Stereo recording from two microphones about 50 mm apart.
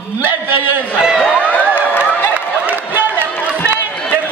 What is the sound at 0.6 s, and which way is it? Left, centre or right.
Speech, left.